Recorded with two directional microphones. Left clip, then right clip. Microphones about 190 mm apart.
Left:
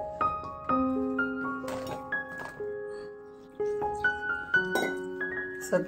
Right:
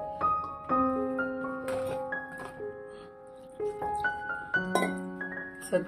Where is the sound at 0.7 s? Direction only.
Centre (ahead or behind).